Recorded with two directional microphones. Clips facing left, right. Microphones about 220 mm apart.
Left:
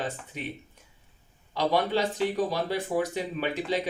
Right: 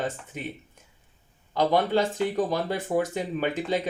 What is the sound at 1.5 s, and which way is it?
Speech, 50° right (ahead or behind).